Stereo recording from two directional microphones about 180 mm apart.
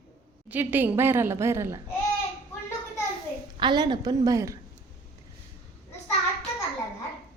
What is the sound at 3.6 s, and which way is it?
Speech, 25° right (ahead or behind).